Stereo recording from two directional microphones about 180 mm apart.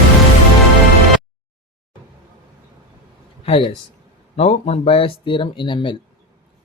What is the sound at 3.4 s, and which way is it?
Speech, 30° left (ahead or behind).